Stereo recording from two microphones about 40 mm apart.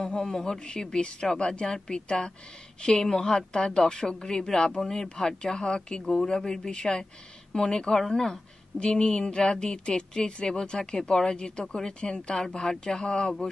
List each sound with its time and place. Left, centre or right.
0.0 s a woman's voice: centre